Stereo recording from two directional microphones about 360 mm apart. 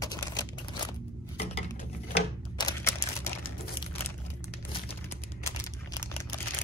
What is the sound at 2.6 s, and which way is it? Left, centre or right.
Single-lens reflex camera, centre.